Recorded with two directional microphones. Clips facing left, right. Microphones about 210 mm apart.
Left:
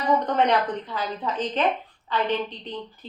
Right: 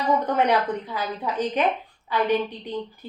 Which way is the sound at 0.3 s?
10° right (ahead or behind).